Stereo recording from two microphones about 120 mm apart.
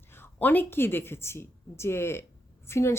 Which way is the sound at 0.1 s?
15° left (ahead or behind).